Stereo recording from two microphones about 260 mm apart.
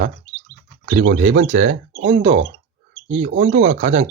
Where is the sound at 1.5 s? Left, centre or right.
Right.